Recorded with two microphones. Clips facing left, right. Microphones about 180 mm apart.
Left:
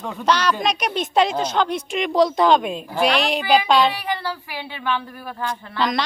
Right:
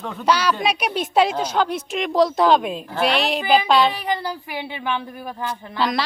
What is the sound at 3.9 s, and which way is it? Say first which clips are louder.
A woman's voice: right 1 dB; 20° right (ahead or behind).